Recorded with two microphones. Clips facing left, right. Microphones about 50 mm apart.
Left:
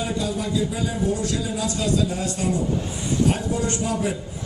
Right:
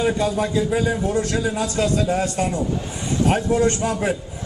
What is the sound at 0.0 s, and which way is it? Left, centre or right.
A man's voice, right.